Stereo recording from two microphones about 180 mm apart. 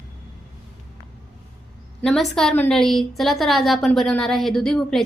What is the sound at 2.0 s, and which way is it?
A woman's voice, centre (ahead or behind).